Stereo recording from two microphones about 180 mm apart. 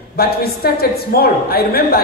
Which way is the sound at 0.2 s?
60° left (ahead or behind).